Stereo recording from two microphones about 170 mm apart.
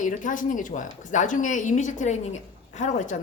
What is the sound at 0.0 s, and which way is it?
Speech, 50° left (ahead or behind).